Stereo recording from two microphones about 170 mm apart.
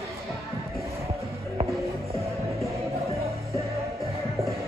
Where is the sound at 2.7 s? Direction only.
15° right (ahead or behind).